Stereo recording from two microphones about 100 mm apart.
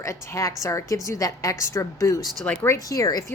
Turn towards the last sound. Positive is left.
turn(degrees=35)  # may be behind; listen again after turning